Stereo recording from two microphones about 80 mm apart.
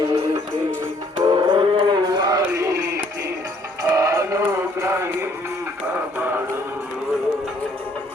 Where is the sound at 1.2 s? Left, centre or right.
Right.